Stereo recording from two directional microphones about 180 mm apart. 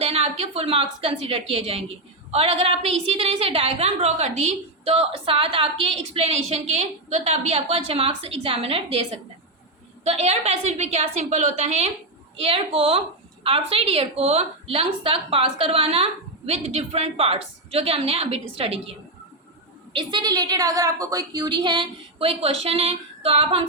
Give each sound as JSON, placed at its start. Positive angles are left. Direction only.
{"t": 0.0, "sound": "a woman's voice", "side_deg": -35}
{"t": 10.0, "sound": "a woman's voice", "side_deg": -35}